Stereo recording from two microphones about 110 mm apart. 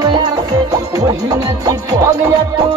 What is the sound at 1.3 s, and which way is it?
Music, 30° right (ahead or behind).